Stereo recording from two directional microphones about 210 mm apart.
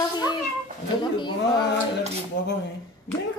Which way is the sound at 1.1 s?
20° left (ahead or behind).